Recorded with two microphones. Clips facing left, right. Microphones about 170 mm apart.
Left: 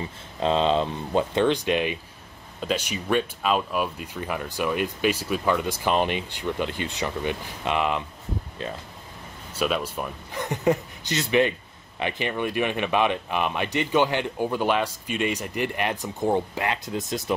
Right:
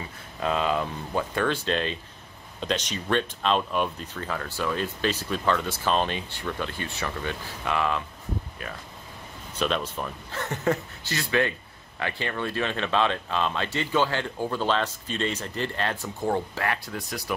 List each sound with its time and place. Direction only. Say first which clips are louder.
0.4 s speech: left 4 dB; 25° left (ahead or behind)
9.5 s speech: left 2 dB; 10° left (ahead or behind)